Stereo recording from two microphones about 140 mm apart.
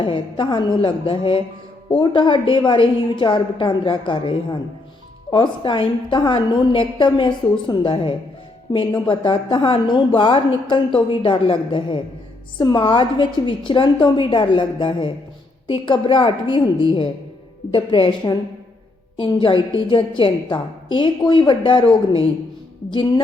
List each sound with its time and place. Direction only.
0.0 s a woman's voice: 35° left (ahead or behind)
22.9 s a woman's voice: 35° left (ahead or behind)